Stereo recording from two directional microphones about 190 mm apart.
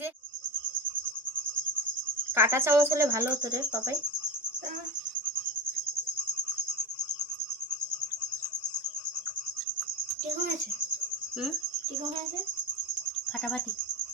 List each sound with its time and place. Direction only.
2.3 s speech: 15° right (ahead or behind)